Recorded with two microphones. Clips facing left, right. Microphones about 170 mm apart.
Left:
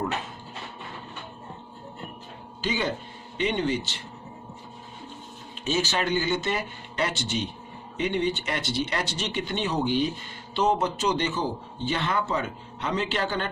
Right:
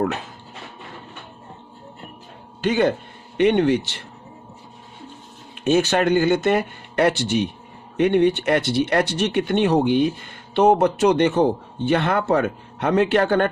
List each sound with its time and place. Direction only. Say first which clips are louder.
2.6 s speech: right 9 dB; 55° right (ahead or behind)
5.6 s speech: right 9 dB; 55° right (ahead or behind)